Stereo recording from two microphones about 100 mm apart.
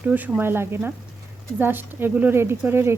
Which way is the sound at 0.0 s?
15° right (ahead or behind).